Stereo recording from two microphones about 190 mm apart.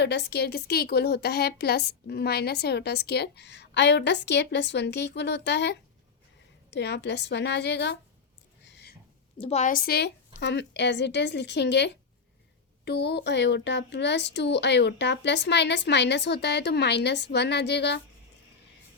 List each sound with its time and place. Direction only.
0.0 s a woman's voice: 60° left (ahead or behind)
9.4 s a woman's voice: 35° left (ahead or behind); by 18.0 s 60° left (ahead or behind)